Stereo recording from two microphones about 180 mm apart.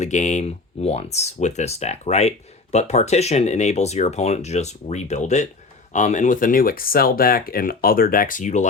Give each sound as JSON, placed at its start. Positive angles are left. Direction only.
{"t": 0.0, "sound": "speech", "side_deg": 40}